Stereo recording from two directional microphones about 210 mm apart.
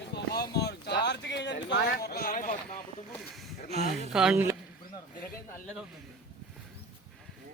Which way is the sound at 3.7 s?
30° right (ahead or behind).